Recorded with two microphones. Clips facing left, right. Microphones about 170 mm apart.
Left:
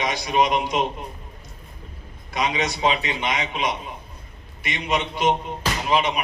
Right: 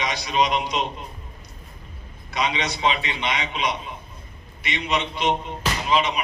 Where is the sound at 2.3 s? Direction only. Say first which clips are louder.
Left 1 dB; 45° left (ahead or behind).